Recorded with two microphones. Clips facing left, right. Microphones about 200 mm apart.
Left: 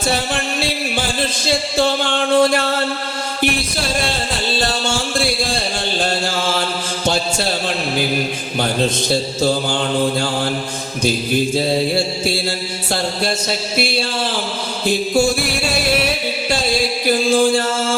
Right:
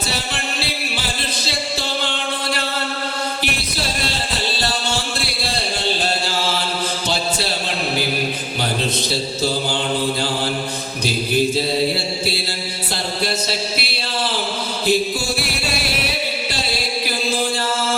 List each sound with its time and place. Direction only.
2.0 s music: 50° left (ahead or behind)
7.0 s a sound: 50° left (ahead or behind)
14.8 s chant: 50° left (ahead or behind)